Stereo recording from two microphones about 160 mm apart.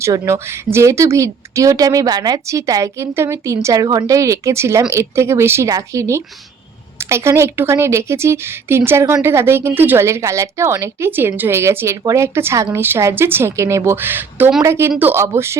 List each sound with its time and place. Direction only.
0.0 s speech: 20° right (ahead or behind)